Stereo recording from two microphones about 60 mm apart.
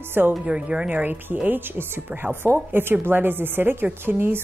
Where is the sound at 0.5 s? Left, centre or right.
Centre.